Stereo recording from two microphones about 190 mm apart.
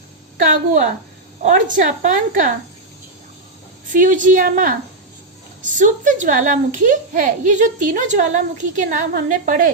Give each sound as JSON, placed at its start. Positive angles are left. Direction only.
{"t": 0.4, "sound": "a woman's voice", "side_deg": -45}
{"t": 3.9, "sound": "a woman's voice", "side_deg": -45}